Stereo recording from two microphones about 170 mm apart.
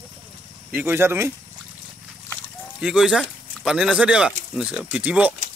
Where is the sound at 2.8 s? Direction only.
5° right (ahead or behind).